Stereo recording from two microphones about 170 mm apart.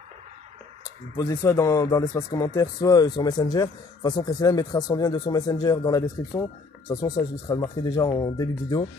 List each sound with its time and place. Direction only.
1.1 s speech: 15° left (ahead or behind)